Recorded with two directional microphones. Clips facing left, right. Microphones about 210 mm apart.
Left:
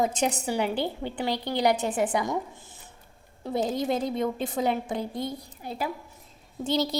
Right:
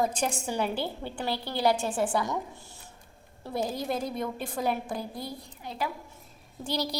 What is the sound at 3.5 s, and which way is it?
A woman's voice, 20° left (ahead or behind).